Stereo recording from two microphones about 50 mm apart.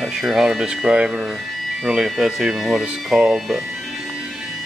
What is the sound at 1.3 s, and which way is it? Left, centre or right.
Music, centre.